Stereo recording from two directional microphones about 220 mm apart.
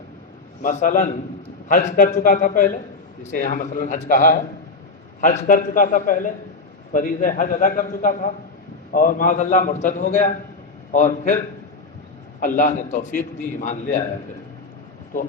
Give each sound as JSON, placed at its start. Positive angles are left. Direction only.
{"t": 0.6, "sound": "a man's voice", "side_deg": 35}
{"t": 12.4, "sound": "a man's voice", "side_deg": 35}